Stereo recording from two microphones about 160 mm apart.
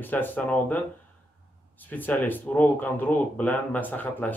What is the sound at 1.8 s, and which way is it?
Speech, 10° left (ahead or behind).